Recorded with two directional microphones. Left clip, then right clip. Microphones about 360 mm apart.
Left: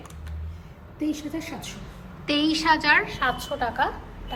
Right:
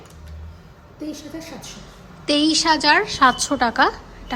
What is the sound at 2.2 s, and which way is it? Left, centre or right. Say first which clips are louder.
A woman's voice: right 4 dB; centre.